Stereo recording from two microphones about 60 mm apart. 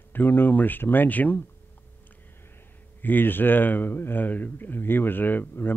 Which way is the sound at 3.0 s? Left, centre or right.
Left.